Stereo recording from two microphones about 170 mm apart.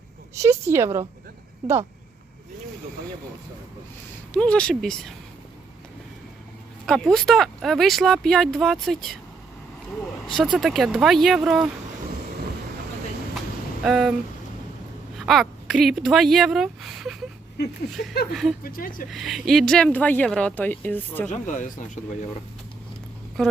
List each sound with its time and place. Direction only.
0.3 s a woman's voice: 15° right (ahead or behind)
4.4 s speech: 5° left (ahead or behind)
6.8 s speech: 5° left (ahead or behind)
10.2 s speech: centre (ahead or behind)
13.8 s speech: centre (ahead or behind)
15.3 s speech: centre (ahead or behind)
18.3 s speech: centre (ahead or behind)
18.6 s speech: 55° left (ahead or behind)
19.1 s speech: centre (ahead or behind)
21.2 s speech: 45° left (ahead or behind)
23.4 s speech: 5° left (ahead or behind)